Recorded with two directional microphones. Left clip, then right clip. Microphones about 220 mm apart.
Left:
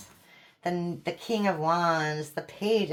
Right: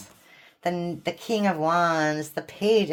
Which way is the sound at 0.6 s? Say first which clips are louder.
Right 4 dB; 50° right (ahead or behind).